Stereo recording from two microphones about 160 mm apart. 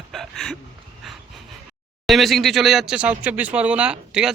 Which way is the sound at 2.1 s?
Centre (ahead or behind).